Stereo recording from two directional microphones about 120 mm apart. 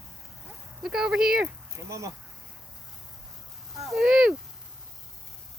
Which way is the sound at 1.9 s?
25° right (ahead or behind).